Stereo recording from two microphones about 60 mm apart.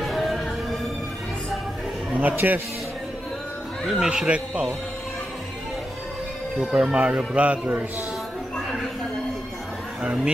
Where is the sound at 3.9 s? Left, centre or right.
Centre.